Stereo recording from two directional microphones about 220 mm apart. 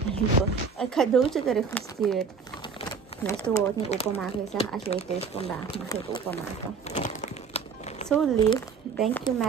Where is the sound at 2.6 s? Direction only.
20° left (ahead or behind).